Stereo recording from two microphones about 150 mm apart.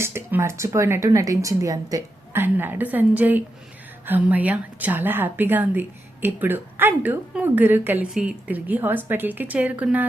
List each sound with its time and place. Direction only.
0.0 s a woman's voice: 15° right (ahead or behind)